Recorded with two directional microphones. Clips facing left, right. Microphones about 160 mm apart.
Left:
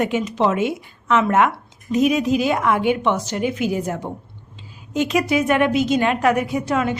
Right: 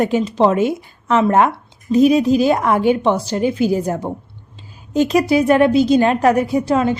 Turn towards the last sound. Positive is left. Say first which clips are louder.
# right 5 dB
turn(degrees=-30)  # may be behind; listen again after turning